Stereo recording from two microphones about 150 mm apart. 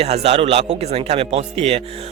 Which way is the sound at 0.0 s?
45° right (ahead or behind).